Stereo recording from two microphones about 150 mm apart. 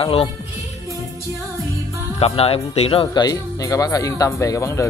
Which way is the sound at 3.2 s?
20° left (ahead or behind).